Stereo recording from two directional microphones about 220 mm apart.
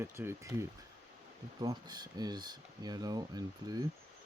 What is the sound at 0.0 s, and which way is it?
Speech, 10° right (ahead or behind).